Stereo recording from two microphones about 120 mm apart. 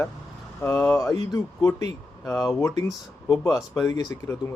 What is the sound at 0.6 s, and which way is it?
Speech, 25° left (ahead or behind).